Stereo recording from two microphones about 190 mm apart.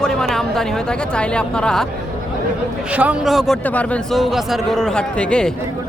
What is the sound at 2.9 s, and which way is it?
A man's voice, 5° right (ahead or behind).